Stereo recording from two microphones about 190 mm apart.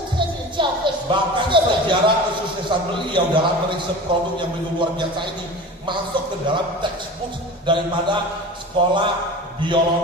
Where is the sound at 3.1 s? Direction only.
25° right (ahead or behind).